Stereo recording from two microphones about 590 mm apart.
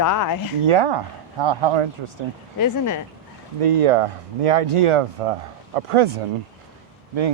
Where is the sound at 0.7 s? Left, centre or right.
Right.